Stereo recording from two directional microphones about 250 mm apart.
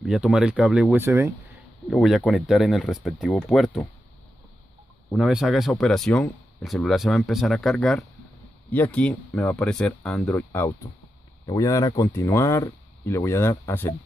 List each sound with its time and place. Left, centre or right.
0.0 s speech: centre
5.1 s speech: centre